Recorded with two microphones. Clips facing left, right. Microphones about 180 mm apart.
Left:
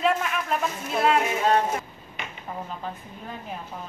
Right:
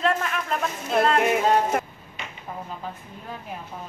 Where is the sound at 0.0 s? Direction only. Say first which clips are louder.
Even; 5° left (ahead or behind).